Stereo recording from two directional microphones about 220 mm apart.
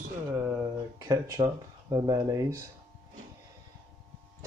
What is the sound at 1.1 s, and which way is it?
Speech, 15° right (ahead or behind).